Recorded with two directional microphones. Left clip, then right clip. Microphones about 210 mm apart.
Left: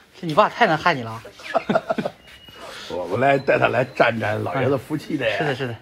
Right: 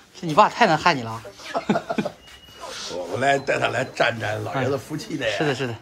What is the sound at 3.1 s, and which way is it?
A man's voice, 25° left (ahead or behind).